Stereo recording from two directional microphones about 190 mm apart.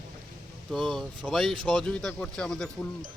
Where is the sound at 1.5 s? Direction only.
25° right (ahead or behind).